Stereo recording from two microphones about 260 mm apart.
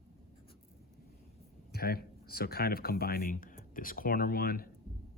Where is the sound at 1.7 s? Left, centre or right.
Left.